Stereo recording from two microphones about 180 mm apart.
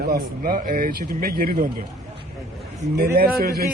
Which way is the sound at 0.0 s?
55° right (ahead or behind).